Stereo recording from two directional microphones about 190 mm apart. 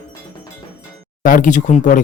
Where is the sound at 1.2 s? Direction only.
45° left (ahead or behind).